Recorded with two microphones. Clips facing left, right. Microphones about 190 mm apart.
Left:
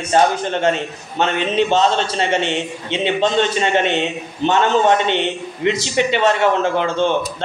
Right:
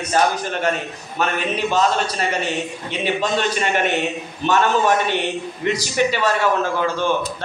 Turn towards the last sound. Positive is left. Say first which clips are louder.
# left 3 dB
turn(degrees=25)  # may be behind; listen again after turning